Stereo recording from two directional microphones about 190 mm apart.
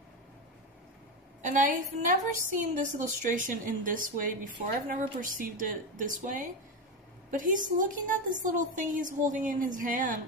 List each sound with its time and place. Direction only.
1.4 s a woman's voice: 40° right (ahead or behind)